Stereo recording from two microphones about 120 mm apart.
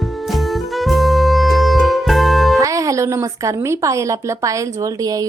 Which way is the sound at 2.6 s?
25° right (ahead or behind).